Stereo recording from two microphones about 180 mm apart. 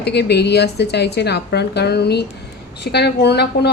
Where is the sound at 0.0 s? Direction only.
65° left (ahead or behind).